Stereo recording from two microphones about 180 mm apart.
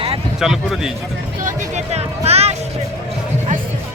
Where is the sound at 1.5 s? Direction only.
40° right (ahead or behind).